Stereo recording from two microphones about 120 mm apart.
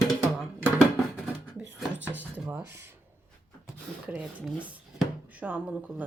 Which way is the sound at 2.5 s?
20° right (ahead or behind).